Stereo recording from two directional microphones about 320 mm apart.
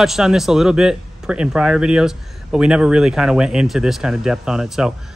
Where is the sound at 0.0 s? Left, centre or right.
Centre.